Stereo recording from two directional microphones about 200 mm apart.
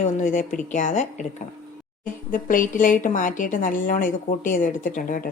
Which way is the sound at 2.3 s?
40° left (ahead or behind).